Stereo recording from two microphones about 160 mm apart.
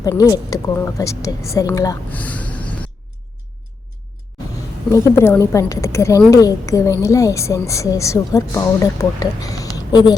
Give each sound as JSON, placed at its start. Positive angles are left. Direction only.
{"t": 0.0, "sound": "a woman's voice", "side_deg": 20}
{"t": 2.0, "sound": "snort", "side_deg": 10}
{"t": 4.9, "sound": "a woman's voice", "side_deg": 20}